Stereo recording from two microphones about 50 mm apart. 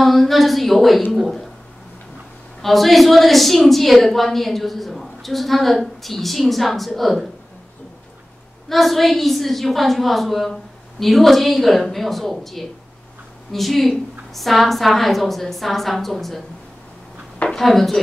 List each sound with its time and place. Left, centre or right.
0.0 s a woman's voice: centre
2.6 s a woman's voice: centre
8.6 s a woman's voice: centre
17.5 s speech: centre